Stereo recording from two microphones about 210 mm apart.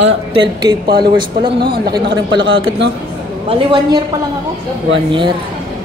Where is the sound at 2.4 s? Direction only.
65° right (ahead or behind).